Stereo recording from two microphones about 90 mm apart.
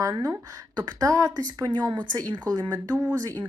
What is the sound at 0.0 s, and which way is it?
Speech, 35° right (ahead or behind).